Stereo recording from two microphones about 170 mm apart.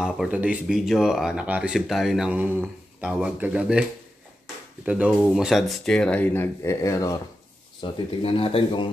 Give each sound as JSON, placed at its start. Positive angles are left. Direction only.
{"t": 0.0, "sound": "speech", "side_deg": -5}
{"t": 4.8, "sound": "speech", "side_deg": -5}
{"t": 7.8, "sound": "speech", "side_deg": 35}